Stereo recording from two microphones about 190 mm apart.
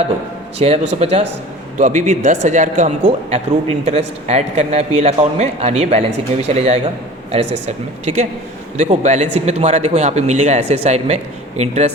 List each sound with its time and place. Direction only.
0.6 s a man's voice: 35° right (ahead or behind)